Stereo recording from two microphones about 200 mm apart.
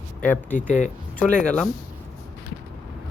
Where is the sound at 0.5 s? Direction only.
35° left (ahead or behind).